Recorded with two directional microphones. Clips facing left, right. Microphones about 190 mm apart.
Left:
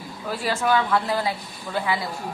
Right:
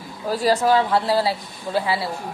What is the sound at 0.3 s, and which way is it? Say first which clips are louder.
Speech: right 5 dB; 40° right (ahead or behind).